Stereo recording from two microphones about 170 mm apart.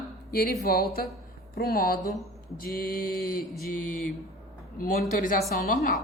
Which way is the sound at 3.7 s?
55° left (ahead or behind).